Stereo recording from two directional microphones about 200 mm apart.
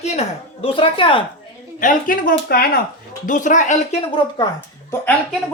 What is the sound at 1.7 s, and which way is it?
Speech, 40° left (ahead or behind).